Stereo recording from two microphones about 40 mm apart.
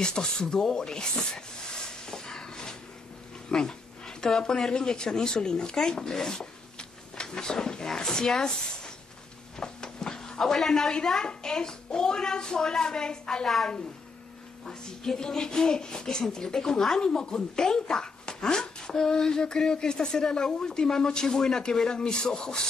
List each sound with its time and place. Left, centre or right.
0.0 s speech: centre
1.9 s a sound: centre
3.4 s speech: centre
9.6 s a sound: centre
11.0 s speech: centre
14.6 s speech: centre